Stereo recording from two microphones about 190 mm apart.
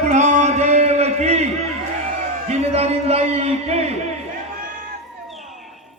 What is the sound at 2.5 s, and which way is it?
Speech, 35° right (ahead or behind).